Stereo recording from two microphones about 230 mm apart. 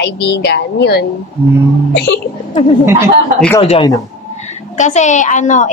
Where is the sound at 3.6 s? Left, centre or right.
Left.